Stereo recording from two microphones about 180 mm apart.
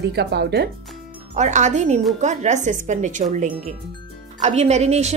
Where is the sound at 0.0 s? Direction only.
65° right (ahead or behind).